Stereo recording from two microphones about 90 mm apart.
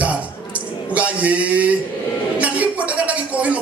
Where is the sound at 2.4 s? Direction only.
15° right (ahead or behind).